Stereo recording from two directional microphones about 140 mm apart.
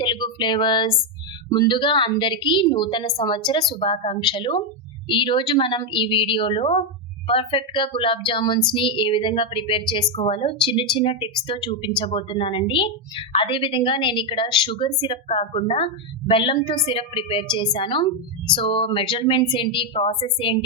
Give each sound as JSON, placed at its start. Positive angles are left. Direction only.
{"t": 0.0, "sound": "a woman's voice", "side_deg": 35}